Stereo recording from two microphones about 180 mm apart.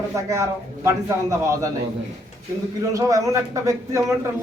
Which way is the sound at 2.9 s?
20° right (ahead or behind).